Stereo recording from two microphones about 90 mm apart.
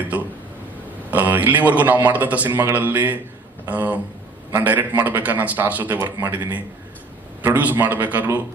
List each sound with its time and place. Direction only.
1.1 s a man's voice: 20° right (ahead or behind)